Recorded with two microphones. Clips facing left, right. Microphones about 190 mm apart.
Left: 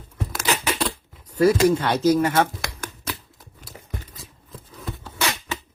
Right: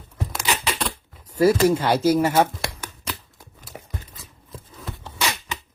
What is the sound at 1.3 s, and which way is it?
Speech, 5° right (ahead or behind).